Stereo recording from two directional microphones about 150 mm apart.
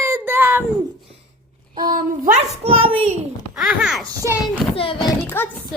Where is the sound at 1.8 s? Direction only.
65° right (ahead or behind).